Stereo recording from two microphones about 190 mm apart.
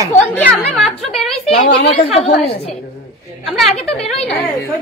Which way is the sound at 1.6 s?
35° left (ahead or behind).